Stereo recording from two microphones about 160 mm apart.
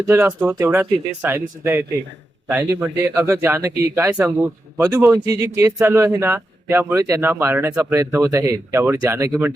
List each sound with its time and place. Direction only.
0.0 s speech: 15° right (ahead or behind)